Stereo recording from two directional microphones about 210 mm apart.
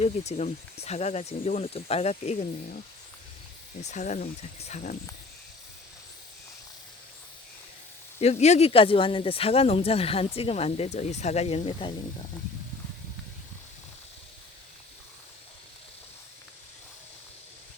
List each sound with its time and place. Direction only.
0.0 s speech: 30° left (ahead or behind)
3.8 s speech: 35° left (ahead or behind)
8.2 s speech: 30° left (ahead or behind)